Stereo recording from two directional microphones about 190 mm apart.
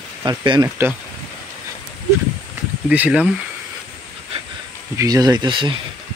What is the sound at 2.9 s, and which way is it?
Speech, 5° right (ahead or behind).